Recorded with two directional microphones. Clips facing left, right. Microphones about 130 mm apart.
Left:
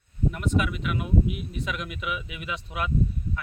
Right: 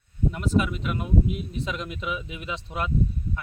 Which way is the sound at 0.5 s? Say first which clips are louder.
Right 2 dB; 35° right (ahead or behind).